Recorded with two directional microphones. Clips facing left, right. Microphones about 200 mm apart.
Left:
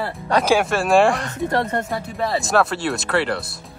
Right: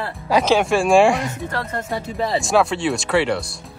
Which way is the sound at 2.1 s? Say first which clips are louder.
Right 1 dB; 20° right (ahead or behind).